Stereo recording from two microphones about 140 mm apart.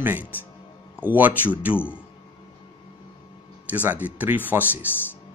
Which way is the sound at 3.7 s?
10° right (ahead or behind).